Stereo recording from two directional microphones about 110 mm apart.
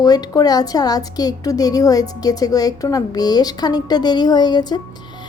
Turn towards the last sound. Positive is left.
turn(degrees=40)  # may be behind; listen again after turning